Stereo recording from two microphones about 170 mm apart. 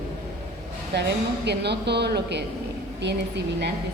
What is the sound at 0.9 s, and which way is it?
A woman's voice, 80° right.